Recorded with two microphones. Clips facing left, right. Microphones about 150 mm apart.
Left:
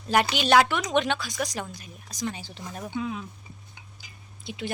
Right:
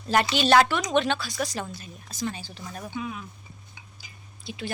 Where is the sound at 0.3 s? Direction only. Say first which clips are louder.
Right 2 dB; 15° left (ahead or behind).